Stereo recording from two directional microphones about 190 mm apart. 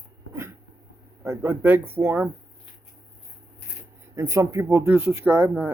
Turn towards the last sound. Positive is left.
turn(degrees=-10)  # may be behind; listen again after turning